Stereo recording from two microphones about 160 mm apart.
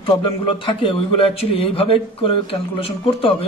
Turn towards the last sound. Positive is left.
turn(degrees=35)  # may be behind; listen again after turning